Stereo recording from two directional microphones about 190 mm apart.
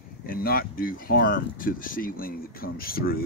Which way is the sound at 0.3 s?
50° left (ahead or behind).